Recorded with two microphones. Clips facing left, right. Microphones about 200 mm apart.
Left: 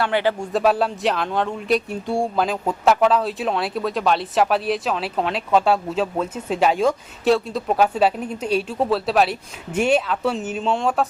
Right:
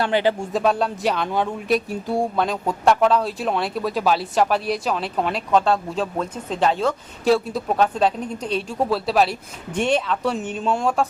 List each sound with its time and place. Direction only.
0.0 s speech: 20° right (ahead or behind)
0.3 s speech: centre (ahead or behind)
7.3 s speech: centre (ahead or behind)